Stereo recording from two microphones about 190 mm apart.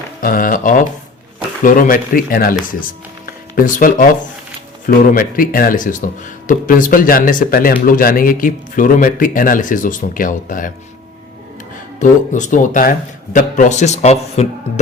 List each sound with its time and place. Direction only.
0.2 s speech: 45° left (ahead or behind)
11.9 s speech: 40° left (ahead or behind)